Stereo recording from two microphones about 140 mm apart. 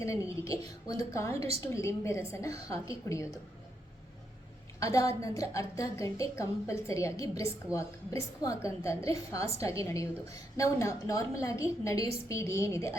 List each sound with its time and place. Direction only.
0.0 s a woman's voice: 20° left (ahead or behind)
1.4 s a woman's voice: 45° right (ahead or behind)
1.6 s a woman's voice: 20° left (ahead or behind)
4.8 s a woman's voice: 25° left (ahead or behind)